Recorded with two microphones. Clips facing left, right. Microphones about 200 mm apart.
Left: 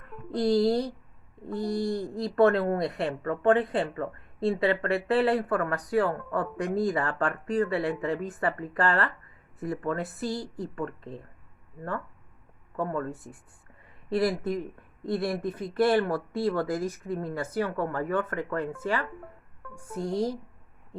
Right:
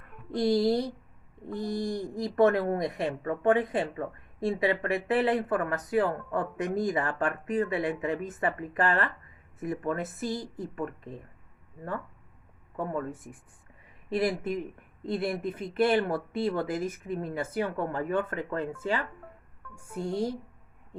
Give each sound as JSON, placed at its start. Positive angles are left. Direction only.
{"t": 0.3, "sound": "speech", "side_deg": -15}
{"t": 12.7, "sound": "speech", "side_deg": -20}
{"t": 14.1, "sound": "speech", "side_deg": -20}